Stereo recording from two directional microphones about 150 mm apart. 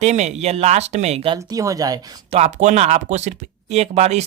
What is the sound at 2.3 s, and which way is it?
Speech, 45° right (ahead or behind).